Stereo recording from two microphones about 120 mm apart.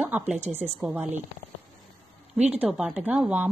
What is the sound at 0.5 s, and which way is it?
Speech, 15° right (ahead or behind).